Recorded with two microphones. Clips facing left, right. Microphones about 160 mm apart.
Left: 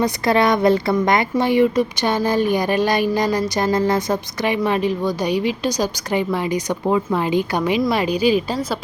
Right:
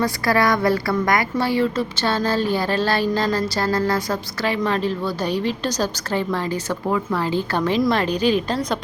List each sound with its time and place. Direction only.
0.0 s a woman's voice: 20° left (ahead or behind); by 8.8 s 5° left (ahead or behind)